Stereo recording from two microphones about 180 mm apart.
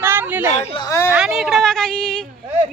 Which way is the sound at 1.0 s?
5° right (ahead or behind).